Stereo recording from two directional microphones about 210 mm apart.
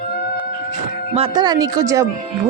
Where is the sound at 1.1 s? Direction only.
25° right (ahead or behind).